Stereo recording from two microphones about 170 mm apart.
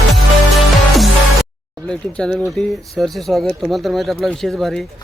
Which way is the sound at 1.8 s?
5° left (ahead or behind).